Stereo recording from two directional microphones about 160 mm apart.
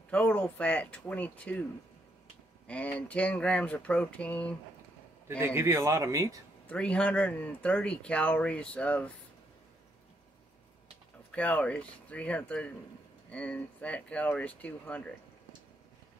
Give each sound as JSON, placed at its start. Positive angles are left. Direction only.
{"t": 0.1, "sound": "speech", "side_deg": 10}
{"t": 2.6, "sound": "speech", "side_deg": 10}
{"t": 5.4, "sound": "speech", "side_deg": -15}
{"t": 6.7, "sound": "speech", "side_deg": 5}
{"t": 11.3, "sound": "speech", "side_deg": 10}